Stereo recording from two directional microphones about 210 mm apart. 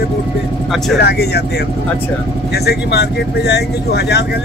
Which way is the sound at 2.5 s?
50° left (ahead or behind).